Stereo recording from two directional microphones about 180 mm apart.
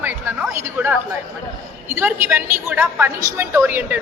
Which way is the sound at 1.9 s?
10° right (ahead or behind).